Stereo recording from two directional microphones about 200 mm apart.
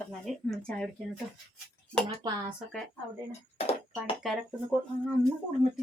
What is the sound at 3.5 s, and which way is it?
Music, 30° left (ahead or behind).